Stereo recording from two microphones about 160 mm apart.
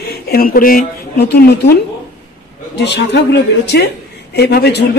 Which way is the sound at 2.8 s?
90° left.